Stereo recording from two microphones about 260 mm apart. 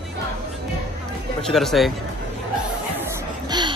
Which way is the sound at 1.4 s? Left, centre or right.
Centre.